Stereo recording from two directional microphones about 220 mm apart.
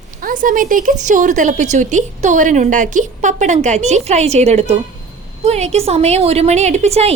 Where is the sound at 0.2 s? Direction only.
40° right (ahead or behind).